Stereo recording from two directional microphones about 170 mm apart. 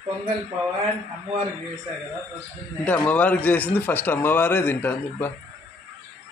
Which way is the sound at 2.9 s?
10° left (ahead or behind).